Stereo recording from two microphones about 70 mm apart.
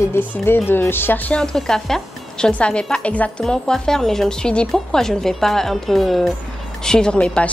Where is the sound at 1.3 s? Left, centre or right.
Centre.